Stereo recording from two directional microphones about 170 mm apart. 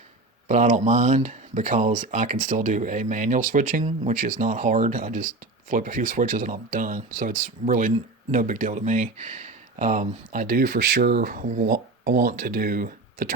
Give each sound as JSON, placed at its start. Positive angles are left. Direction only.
{"t": 0.4, "sound": "speech", "side_deg": -50}
{"t": 11.7, "sound": "speech", "side_deg": -65}